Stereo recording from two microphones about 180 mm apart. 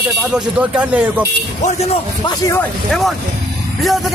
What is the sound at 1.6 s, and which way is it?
Speech, 35° left (ahead or behind).